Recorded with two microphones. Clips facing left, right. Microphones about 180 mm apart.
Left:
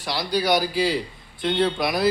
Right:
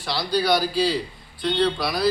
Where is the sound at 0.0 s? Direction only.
15° left (ahead or behind).